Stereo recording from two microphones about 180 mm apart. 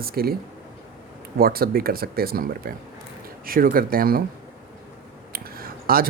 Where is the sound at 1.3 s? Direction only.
55° right (ahead or behind).